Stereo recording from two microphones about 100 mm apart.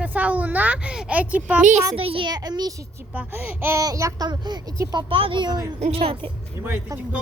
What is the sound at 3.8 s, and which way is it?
Speech, 35° right (ahead or behind).